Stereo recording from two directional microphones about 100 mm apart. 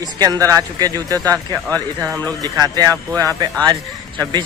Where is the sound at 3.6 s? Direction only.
45° right (ahead or behind).